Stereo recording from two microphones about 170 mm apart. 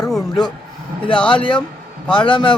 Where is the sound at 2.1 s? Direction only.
30° left (ahead or behind).